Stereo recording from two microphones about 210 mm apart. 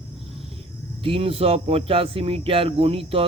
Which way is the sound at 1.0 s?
25° right (ahead or behind).